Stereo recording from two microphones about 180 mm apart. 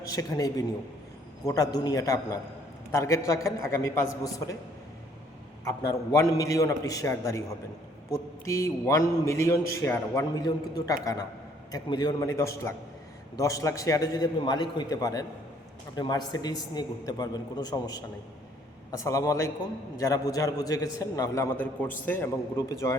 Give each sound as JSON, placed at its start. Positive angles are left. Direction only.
{"t": 0.0, "sound": "a man's voice", "side_deg": 20}
{"t": 6.1, "sound": "a man's voice", "side_deg": 20}